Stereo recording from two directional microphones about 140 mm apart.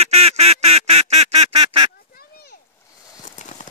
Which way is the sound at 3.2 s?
60° left (ahead or behind).